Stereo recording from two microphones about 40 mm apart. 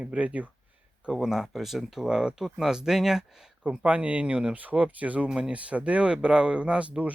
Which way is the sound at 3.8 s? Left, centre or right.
Right.